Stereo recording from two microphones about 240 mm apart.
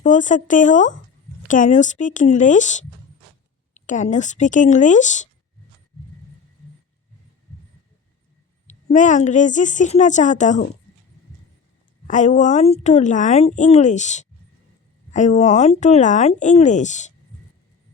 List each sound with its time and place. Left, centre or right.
0.0 s a woman's voice: left
8.6 s a woman's voice: left
12.0 s a woman's voice: left